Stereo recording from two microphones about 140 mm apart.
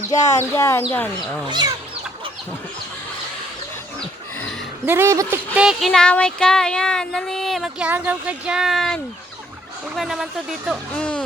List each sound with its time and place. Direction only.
0.1 s speech: 20° left (ahead or behind)
1.5 s speech: 30° right (ahead or behind)
4.9 s speech: 20° right (ahead or behind)
5.5 s speech: 5° right (ahead or behind)
5.9 s speech: 5° left (ahead or behind)